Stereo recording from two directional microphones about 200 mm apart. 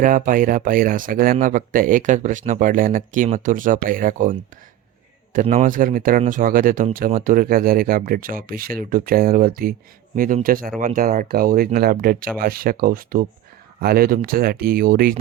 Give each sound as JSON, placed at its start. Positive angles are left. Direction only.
{"t": 0.0, "sound": "speech", "side_deg": -40}